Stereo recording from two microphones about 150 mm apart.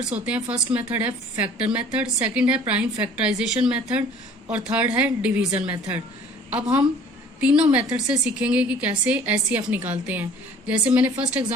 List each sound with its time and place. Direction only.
0.0 s a woman's voice: 10° right (ahead or behind)